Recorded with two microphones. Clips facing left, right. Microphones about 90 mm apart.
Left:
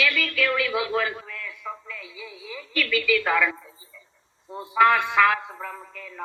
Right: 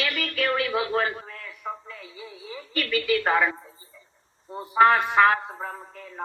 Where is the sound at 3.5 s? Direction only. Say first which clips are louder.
Even; 30° right (ahead or behind).